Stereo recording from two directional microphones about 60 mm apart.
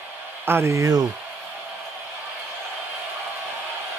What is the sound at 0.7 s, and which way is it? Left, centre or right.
Speech, right.